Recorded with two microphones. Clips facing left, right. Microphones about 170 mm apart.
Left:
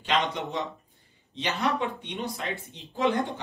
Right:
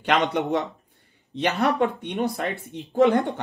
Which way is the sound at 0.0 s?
60° right (ahead or behind).